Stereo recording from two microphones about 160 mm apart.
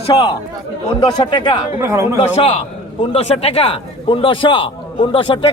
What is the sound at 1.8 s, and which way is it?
Speech, 15° right (ahead or behind).